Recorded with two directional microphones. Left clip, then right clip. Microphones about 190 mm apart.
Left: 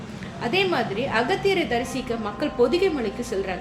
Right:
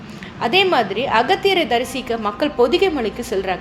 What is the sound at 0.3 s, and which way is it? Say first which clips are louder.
A woman's voice: right 7 dB; 35° right (ahead or behind).